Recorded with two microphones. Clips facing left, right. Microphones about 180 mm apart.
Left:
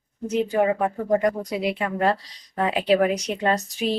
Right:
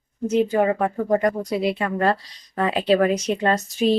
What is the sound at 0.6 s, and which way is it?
Speech, 10° left (ahead or behind).